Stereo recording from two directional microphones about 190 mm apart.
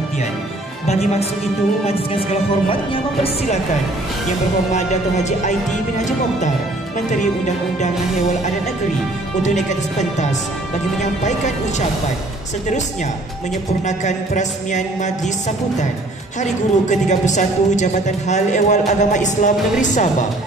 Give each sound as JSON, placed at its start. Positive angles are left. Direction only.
{"t": 4.7, "sound": "a woman's voice", "side_deg": 35}
{"t": 9.4, "sound": "a woman's voice", "side_deg": 40}
{"t": 13.8, "sound": "a woman's voice", "side_deg": 40}
{"t": 16.3, "sound": "a woman's voice", "side_deg": 40}